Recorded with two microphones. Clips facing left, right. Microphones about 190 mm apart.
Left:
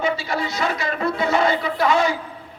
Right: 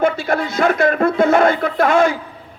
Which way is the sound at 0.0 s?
50° right (ahead or behind).